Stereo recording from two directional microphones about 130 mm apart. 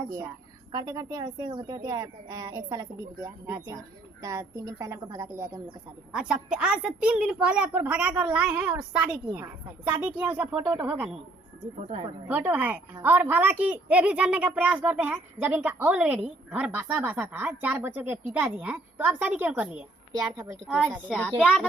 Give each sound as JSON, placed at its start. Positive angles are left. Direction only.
{"t": 0.7, "sound": "speech", "side_deg": -30}
{"t": 6.1, "sound": "a woman's voice", "side_deg": -5}
{"t": 11.8, "sound": "a woman's voice", "side_deg": -55}
{"t": 12.3, "sound": "a woman's voice", "side_deg": -10}
{"t": 20.3, "sound": "speech", "side_deg": -25}
{"t": 20.7, "sound": "a woman's voice", "side_deg": -10}